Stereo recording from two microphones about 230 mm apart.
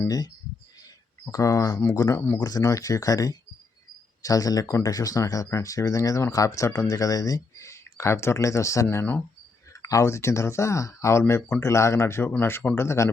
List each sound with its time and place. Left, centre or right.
0.0 s speech: centre
1.3 s speech: centre